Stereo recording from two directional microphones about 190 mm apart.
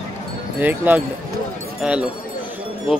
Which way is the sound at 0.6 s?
10° right (ahead or behind).